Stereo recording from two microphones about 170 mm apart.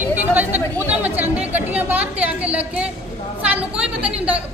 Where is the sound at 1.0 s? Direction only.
10° right (ahead or behind).